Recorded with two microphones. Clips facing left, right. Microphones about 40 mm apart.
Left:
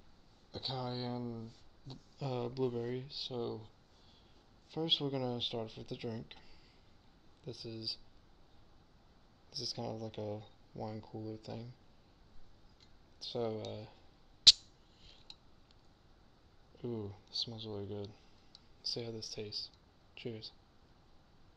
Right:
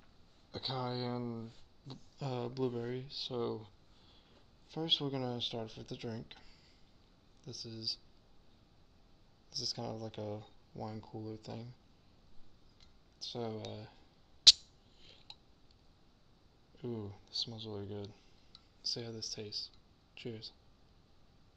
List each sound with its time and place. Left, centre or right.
0.5 s speech: centre
2.1 s speech: centre
4.6 s speech: centre
7.4 s speech: left
9.5 s speech: centre
13.2 s a sound: centre
16.7 s speech: centre